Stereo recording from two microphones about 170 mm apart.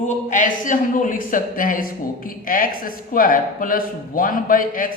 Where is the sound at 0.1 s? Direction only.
45° left (ahead or behind).